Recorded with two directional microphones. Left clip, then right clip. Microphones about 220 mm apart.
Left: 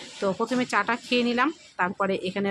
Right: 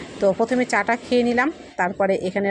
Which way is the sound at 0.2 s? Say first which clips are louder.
Right 7 dB; 5° right (ahead or behind).